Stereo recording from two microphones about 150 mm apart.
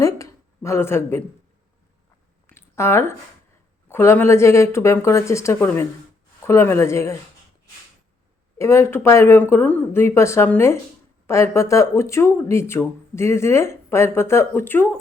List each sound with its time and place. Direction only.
0.0 s speech: 20° left (ahead or behind)
2.5 s a sound: 15° left (ahead or behind)
3.9 s speech: 15° left (ahead or behind)
8.5 s speech: 20° left (ahead or behind)